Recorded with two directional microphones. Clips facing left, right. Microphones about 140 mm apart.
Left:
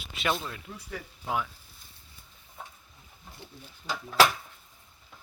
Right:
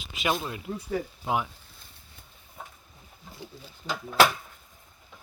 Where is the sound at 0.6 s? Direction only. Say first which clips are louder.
Right 10 dB; 35° right (ahead or behind).